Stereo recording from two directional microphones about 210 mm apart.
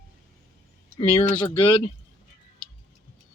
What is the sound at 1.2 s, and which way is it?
Speech, 25° left (ahead or behind).